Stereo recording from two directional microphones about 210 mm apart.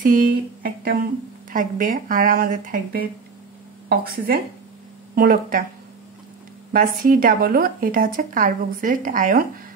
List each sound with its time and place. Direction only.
0.0 s speech: 40° right (ahead or behind)
6.7 s speech: 40° right (ahead or behind)